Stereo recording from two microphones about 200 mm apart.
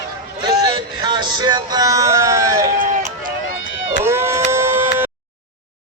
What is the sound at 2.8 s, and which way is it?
Run, 40° right (ahead or behind).